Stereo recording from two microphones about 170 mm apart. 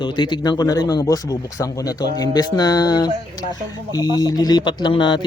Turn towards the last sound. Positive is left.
turn(degrees=30)  # may be behind; listen again after turning